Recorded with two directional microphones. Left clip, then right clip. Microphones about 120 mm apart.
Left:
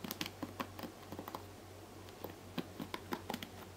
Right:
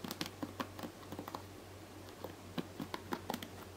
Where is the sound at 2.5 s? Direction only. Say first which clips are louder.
Right 1 dB; 10° right (ahead or behind).